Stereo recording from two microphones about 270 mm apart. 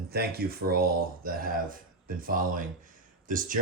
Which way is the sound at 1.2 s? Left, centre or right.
Right.